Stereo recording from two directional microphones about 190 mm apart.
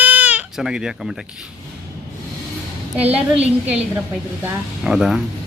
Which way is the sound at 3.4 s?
5° right (ahead or behind).